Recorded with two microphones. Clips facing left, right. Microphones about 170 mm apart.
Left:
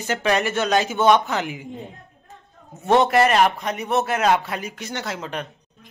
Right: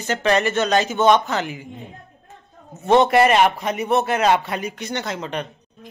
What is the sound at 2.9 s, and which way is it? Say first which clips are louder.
A man's voice: right 2 dB; centre (ahead or behind).